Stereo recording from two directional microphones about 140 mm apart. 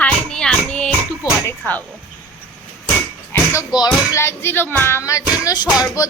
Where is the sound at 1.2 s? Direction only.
30° left (ahead or behind).